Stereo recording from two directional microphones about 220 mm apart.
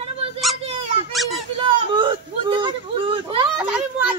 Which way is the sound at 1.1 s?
Centre (ahead or behind).